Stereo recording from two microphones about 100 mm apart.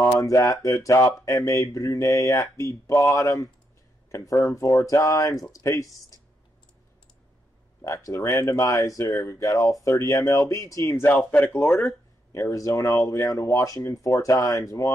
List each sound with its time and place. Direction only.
0.0 s speech: 30° left (ahead or behind)
7.8 s speech: 30° left (ahead or behind)
11.1 s speech: 15° left (ahead or behind); by 14.9 s 35° left (ahead or behind)